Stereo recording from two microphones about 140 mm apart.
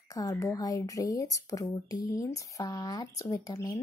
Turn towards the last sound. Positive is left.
turn(degrees=25)  # may be behind; listen again after turning